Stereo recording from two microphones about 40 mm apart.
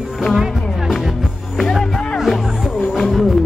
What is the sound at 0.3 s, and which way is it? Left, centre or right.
Music, centre.